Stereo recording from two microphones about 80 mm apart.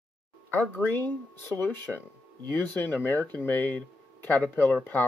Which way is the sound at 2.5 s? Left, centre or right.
Left.